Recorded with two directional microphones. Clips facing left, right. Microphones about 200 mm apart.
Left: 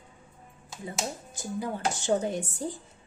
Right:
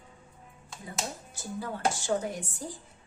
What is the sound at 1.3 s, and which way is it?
A woman's voice, 20° left (ahead or behind).